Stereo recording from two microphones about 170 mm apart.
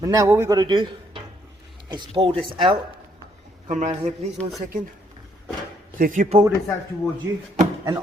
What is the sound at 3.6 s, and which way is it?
Speech, 45° right (ahead or behind).